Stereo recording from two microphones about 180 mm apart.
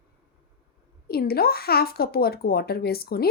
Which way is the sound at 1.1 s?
60° left (ahead or behind).